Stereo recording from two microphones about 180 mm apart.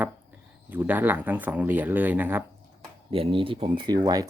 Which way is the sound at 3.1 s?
30° right (ahead or behind).